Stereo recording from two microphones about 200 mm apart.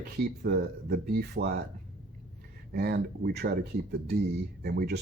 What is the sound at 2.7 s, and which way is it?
Speech, 55° right (ahead or behind).